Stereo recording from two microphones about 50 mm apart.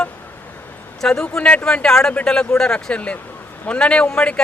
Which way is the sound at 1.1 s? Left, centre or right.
Centre.